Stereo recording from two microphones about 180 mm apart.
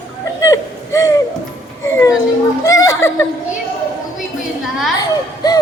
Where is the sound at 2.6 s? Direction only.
20° left (ahead or behind).